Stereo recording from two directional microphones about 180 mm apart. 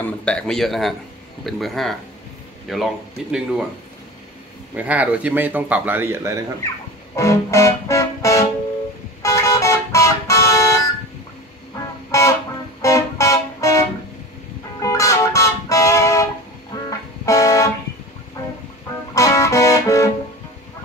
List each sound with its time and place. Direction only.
0.0 s a man's voice: 5° left (ahead or behind)
4.7 s a man's voice: 10° right (ahead or behind)
7.2 s music: 15° left (ahead or behind)
9.2 s vehicle: 15° left (ahead or behind)
12.1 s music: 15° left (ahead or behind)
12.8 s a sound: 15° left (ahead or behind)
14.8 s music: 20° left (ahead or behind)
19.1 s music: 15° left (ahead or behind)